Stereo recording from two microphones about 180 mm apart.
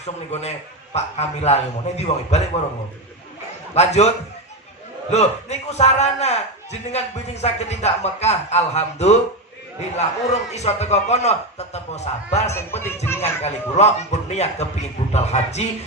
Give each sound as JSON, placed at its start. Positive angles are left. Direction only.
{"t": 0.0, "sound": "a man's voice", "side_deg": 40}
{"t": 3.7, "sound": "a man's voice", "side_deg": 35}
{"t": 5.1, "sound": "a man's voice", "side_deg": 35}
{"t": 12.4, "sound": "speech", "side_deg": 15}
{"t": 13.2, "sound": "a man's voice", "side_deg": 35}